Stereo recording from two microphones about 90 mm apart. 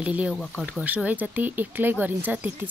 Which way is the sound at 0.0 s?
10° right (ahead or behind).